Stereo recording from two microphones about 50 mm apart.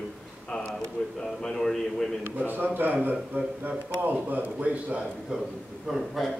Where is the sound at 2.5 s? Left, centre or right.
Right; by 5.4 s centre.